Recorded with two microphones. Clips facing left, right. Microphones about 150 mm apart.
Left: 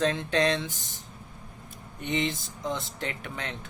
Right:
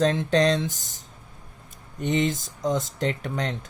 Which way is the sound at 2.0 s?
40° right (ahead or behind).